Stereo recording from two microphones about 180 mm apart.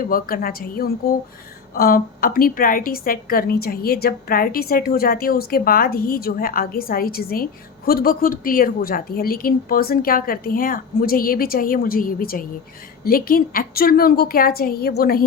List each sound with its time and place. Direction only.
0.0 s a woman's voice: 55° left (ahead or behind)